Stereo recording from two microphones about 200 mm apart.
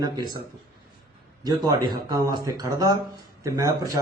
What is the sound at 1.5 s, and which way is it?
A man's voice, 20° right (ahead or behind).